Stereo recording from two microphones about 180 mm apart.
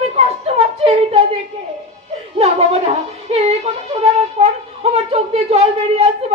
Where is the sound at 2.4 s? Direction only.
35° right (ahead or behind).